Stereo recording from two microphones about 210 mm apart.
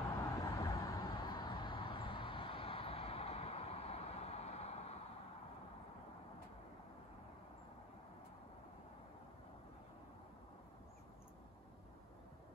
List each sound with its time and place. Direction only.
0.2 s vehicle: 15° left (ahead or behind); by 4.9 s 30° left (ahead or behind)